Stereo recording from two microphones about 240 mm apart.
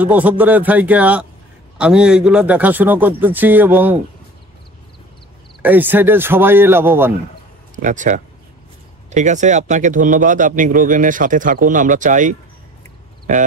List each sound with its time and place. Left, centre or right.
0.0 s a man's voice: centre
5.6 s a man's voice: centre
7.7 s speech: right